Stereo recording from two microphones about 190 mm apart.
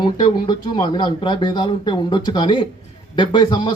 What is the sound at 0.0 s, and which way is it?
Speech, 25° left (ahead or behind).